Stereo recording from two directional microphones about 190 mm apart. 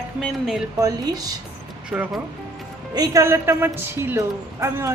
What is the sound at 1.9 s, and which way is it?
A woman's voice, 5° right (ahead or behind).